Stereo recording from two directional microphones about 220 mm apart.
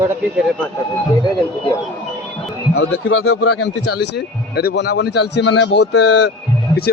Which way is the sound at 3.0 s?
65° left (ahead or behind).